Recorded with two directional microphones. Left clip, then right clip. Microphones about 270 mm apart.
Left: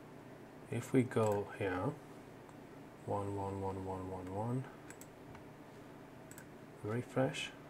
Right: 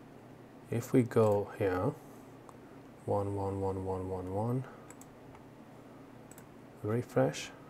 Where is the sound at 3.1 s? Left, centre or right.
Centre.